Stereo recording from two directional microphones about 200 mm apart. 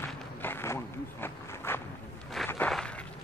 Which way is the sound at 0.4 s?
10° left (ahead or behind).